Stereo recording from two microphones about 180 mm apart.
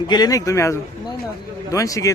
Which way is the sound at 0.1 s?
20° left (ahead or behind).